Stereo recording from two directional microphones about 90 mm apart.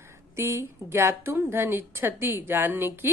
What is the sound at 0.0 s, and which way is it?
A woman's voice, 30° right (ahead or behind).